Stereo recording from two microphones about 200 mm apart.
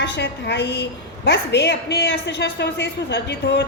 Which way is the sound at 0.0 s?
60° left (ahead or behind).